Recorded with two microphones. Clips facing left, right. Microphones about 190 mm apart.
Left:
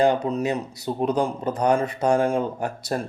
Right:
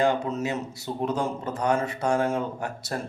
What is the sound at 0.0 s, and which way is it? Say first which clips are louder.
Speech: left 4 dB; 15° left (ahead or behind).